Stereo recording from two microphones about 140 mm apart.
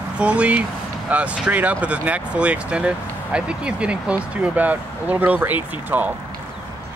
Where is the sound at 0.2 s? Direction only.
10° right (ahead or behind).